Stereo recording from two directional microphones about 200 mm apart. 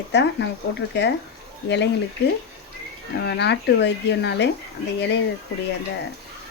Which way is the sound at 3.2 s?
60° left (ahead or behind).